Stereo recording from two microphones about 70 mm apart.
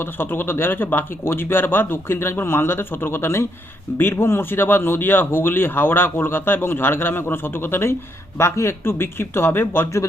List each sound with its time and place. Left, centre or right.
0.0 s speech: left